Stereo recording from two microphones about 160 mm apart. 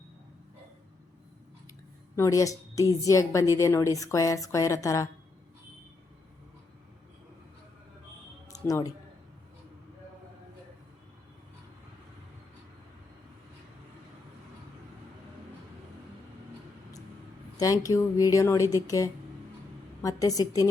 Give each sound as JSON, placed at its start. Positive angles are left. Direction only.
{"t": 2.1, "sound": "a woman's voice", "side_deg": 20}
{"t": 8.5, "sound": "a woman's voice", "side_deg": 20}
{"t": 17.6, "sound": "a woman's voice", "side_deg": 20}